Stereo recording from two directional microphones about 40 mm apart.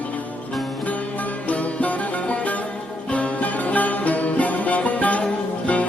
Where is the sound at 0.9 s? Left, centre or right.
Left.